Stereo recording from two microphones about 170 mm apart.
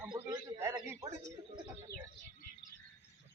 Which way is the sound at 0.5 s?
15° right (ahead or behind).